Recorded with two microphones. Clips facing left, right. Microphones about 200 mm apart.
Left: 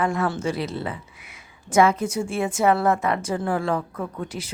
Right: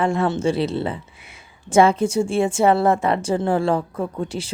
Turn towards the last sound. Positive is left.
turn(degrees=-30)  # may be behind; listen again after turning